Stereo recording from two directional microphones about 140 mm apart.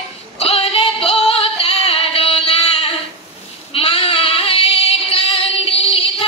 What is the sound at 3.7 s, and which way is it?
Child singing, 45° left (ahead or behind).